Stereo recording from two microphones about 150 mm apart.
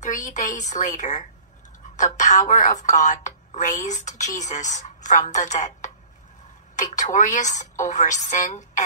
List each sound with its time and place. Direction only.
0.0 s a woman's voice: 55° left (ahead or behind)